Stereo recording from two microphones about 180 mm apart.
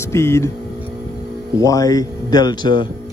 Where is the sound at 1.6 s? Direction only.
20° left (ahead or behind).